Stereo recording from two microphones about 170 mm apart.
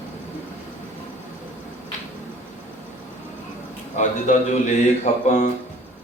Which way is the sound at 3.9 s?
45° left (ahead or behind).